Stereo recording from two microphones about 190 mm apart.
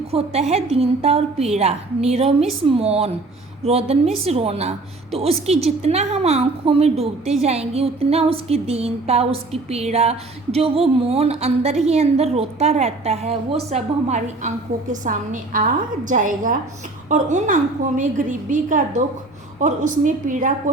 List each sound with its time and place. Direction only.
0.1 s a woman's voice: 30° right (ahead or behind)